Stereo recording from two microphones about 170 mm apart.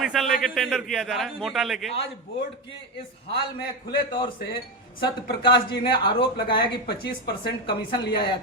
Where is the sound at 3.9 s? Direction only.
30° left (ahead or behind).